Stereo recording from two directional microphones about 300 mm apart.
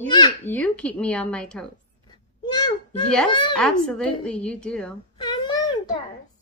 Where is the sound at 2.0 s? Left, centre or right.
Centre.